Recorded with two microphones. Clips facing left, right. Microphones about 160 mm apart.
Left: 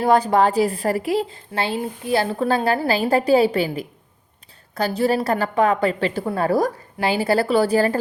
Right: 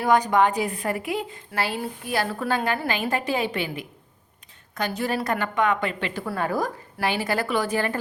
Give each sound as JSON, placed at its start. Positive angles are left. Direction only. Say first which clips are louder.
{"t": 0.0, "sound": "a woman's voice", "louder": "left 3 dB", "side_deg": 30}